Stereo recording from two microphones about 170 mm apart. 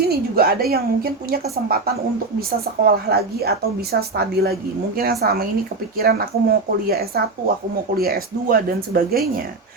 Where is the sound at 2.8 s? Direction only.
65° right (ahead or behind).